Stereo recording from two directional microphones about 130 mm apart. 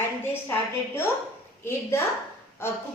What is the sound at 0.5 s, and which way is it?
A woman's voice, 15° left (ahead or behind).